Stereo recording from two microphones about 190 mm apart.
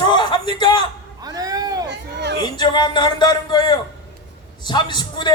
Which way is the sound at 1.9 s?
65° right (ahead or behind).